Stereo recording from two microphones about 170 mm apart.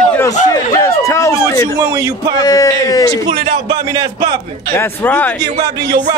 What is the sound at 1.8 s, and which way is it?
Speech, 20° right (ahead or behind).